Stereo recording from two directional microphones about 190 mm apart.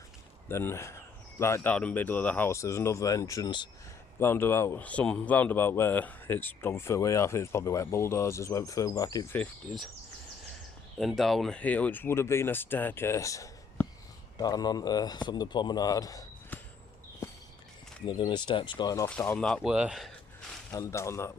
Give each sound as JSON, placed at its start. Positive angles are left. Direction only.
{"t": 0.4, "sound": "speech", "side_deg": 15}
{"t": 10.9, "sound": "speech", "side_deg": 0}
{"t": 17.2, "sound": "walk", "side_deg": 15}
{"t": 18.0, "sound": "speech", "side_deg": 20}
{"t": 20.7, "sound": "speech", "side_deg": 15}